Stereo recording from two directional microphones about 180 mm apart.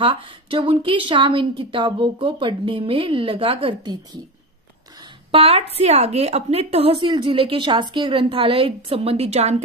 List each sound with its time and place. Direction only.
0.0 s a woman's voice: 30° right (ahead or behind)
5.3 s a woman's voice: 35° right (ahead or behind)